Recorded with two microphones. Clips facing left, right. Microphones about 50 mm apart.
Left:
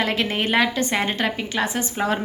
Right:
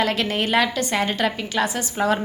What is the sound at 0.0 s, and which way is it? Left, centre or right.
A woman's voice, centre.